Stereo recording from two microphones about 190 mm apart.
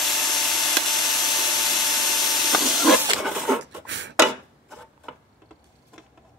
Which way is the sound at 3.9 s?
70° right (ahead or behind).